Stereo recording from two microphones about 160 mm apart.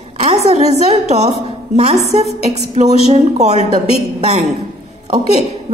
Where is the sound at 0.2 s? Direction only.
40° right (ahead or behind).